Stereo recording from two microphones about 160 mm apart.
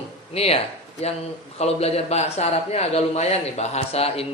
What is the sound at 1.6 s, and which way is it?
A man's voice, 40° left (ahead or behind).